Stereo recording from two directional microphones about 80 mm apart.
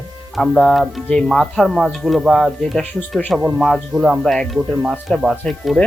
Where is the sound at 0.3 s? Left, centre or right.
Centre.